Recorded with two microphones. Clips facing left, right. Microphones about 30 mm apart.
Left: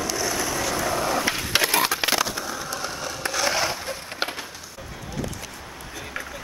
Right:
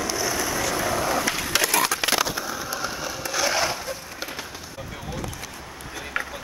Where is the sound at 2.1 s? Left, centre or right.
Centre.